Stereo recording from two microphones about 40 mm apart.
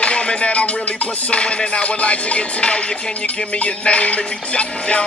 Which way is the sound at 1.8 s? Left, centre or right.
Left.